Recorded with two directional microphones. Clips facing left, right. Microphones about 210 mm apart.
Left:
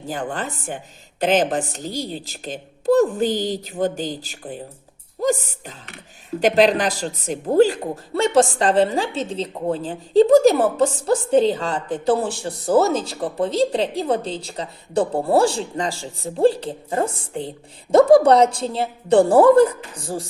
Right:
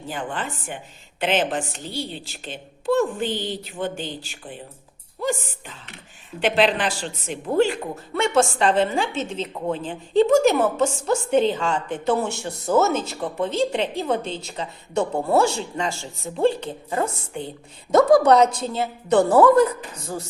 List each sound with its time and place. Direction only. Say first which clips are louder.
0.1 s a man's voice: left 3 dB; 40° left (ahead or behind)